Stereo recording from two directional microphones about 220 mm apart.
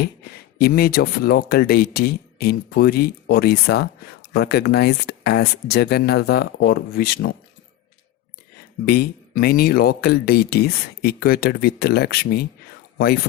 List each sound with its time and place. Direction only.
0.6 s speech: 45° left (ahead or behind)
8.9 s speech: 45° left (ahead or behind)